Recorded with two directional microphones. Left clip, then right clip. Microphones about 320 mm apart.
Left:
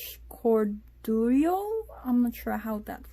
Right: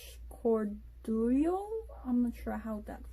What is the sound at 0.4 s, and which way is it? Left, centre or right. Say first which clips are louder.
Speech: left 6 dB; left.